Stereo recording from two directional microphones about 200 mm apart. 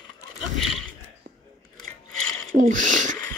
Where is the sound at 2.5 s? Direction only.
40° right (ahead or behind).